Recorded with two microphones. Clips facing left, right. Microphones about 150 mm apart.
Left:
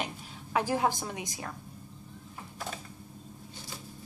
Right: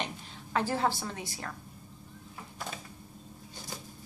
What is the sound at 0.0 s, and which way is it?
A woman's voice, 10° left (ahead or behind).